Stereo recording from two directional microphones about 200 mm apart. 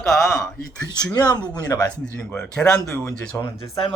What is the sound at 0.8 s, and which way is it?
Speech, 20° left (ahead or behind).